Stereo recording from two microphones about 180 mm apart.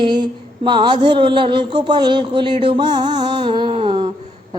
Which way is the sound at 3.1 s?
25° right (ahead or behind).